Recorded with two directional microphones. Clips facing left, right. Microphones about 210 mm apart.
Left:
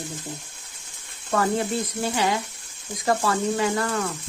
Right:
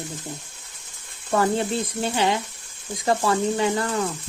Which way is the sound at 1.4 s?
25° right (ahead or behind).